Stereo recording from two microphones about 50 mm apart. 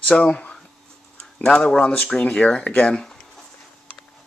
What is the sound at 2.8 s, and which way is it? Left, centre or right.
Speech, centre.